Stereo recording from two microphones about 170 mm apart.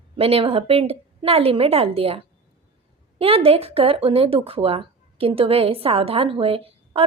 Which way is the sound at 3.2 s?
35° right (ahead or behind).